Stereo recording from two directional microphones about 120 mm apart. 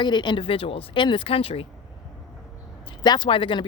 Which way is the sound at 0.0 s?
40° left (ahead or behind).